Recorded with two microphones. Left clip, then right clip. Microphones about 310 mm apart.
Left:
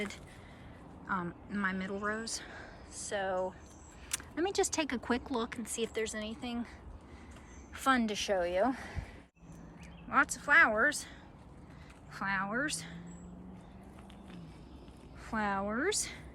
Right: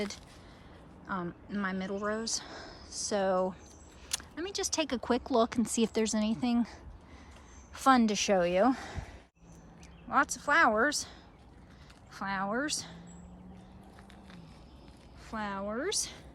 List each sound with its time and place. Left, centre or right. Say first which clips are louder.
1.0 s speech: left 1 dB; centre
4.1 s a woman's voice: left 3 dB; centre
10.1 s speech: even; centre
12.1 s speech: right 1 dB; centre
15.3 s a woman's voice: left 2 dB; centre